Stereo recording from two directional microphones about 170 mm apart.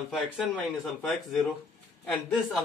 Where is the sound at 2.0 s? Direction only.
Centre (ahead or behind).